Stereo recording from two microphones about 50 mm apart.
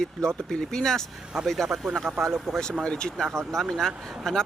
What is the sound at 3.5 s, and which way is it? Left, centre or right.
Speech, centre.